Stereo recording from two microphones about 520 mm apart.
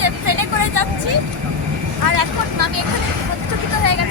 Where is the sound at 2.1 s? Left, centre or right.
Right.